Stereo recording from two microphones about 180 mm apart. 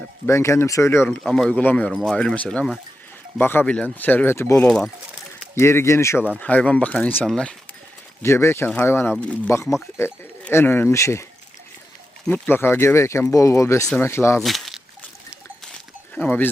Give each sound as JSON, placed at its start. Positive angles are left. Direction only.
{"t": 0.3, "sound": "speech", "side_deg": 15}
{"t": 8.2, "sound": "speech", "side_deg": 15}
{"t": 9.6, "sound": "speech", "side_deg": 0}
{"t": 10.0, "sound": "speech", "side_deg": 15}
{"t": 14.3, "sound": "speech", "side_deg": 0}
{"t": 16.1, "sound": "speech", "side_deg": 10}